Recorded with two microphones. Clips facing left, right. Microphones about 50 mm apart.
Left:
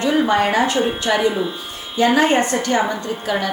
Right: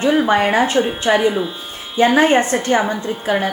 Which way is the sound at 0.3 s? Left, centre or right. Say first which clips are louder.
Right 2 dB; right.